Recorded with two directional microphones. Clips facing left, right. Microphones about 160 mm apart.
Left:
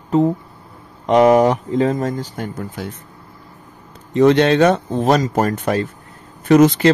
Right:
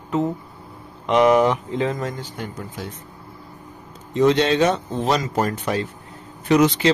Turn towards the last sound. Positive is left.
turn(degrees=50)  # may be behind; listen again after turning